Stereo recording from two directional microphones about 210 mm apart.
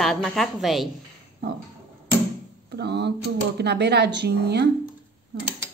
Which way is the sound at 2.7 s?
55° right (ahead or behind).